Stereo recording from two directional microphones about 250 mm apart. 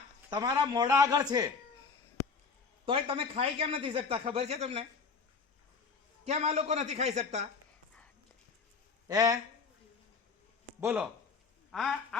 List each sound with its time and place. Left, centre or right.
0.3 s a man's voice: centre
2.8 s speech: right
6.2 s speech: right
9.0 s a man's voice: centre
10.8 s speech: centre
11.7 s quack: centre